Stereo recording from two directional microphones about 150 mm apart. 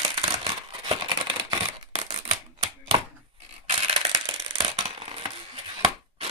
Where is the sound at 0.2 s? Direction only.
40° right (ahead or behind).